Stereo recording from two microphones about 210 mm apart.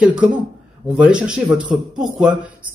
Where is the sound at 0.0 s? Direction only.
5° right (ahead or behind).